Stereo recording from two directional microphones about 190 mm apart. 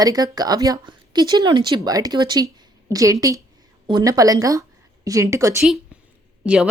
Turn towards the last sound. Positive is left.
turn(degrees=-5)  # may be behind; listen again after turning